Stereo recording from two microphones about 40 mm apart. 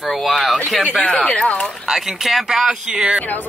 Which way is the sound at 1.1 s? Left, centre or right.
Left.